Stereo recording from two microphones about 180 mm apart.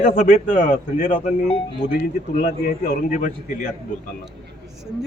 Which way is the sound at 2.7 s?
50° left (ahead or behind).